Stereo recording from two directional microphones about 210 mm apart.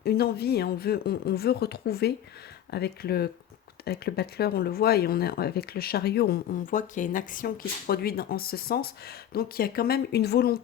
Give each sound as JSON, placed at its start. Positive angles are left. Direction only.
{"t": 0.0, "sound": "speech", "side_deg": 50}